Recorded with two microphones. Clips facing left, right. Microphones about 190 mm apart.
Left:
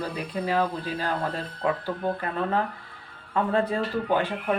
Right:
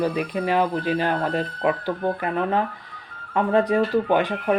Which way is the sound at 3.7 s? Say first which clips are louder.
Right 6 dB; 15° right (ahead or behind).